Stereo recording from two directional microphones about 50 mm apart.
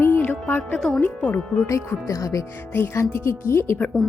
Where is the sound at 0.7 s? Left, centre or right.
Centre.